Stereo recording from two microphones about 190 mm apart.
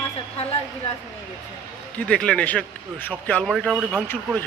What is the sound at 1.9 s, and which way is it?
A man's voice, 5° left (ahead or behind).